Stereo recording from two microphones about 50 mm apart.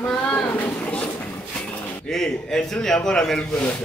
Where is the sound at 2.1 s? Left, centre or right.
Centre.